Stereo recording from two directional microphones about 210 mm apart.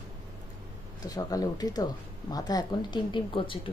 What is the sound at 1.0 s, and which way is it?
Speech, 15° left (ahead or behind).